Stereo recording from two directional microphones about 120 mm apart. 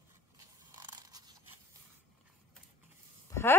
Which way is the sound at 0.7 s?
35° right (ahead or behind).